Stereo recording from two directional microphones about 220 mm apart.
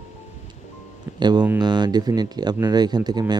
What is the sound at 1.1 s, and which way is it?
Speech, 20° right (ahead or behind).